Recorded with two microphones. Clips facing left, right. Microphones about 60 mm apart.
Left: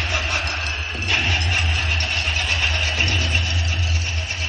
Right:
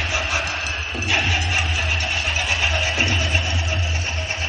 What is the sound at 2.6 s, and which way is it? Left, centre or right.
Vehicle, centre.